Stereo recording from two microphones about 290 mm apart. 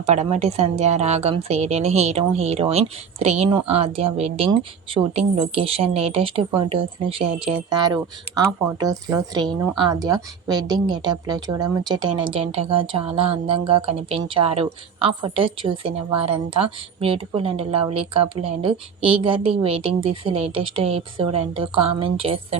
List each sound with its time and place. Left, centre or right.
0.0 s a woman's voice: right